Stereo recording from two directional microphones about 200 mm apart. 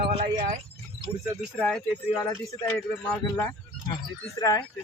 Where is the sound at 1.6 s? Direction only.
5° left (ahead or behind).